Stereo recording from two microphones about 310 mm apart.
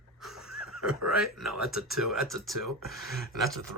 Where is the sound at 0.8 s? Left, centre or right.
Right.